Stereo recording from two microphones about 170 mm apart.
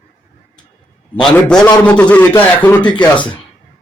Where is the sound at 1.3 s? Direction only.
5° left (ahead or behind).